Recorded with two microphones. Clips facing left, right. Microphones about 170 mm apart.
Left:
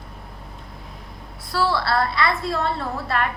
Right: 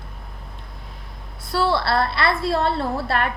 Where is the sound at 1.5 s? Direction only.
25° right (ahead or behind).